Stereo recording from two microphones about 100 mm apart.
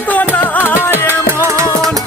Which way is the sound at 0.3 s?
20° left (ahead or behind).